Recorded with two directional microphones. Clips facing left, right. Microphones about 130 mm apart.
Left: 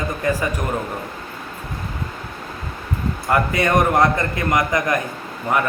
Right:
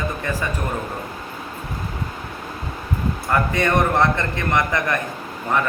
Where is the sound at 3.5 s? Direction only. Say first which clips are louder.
Left 2 dB; 10° left (ahead or behind).